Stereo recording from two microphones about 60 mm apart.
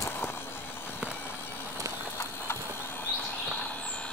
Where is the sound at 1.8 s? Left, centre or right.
Right.